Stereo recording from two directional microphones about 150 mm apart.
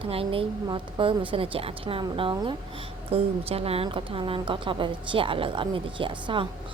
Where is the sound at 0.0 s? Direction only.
40° right (ahead or behind).